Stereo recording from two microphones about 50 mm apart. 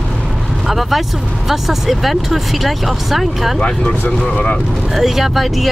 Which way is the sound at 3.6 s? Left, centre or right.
Centre.